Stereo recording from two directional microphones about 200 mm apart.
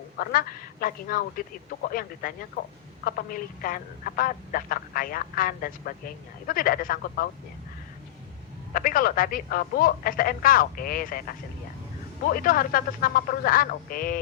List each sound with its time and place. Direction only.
0.2 s speech: 45° left (ahead or behind)
8.7 s speech: 45° left (ahead or behind)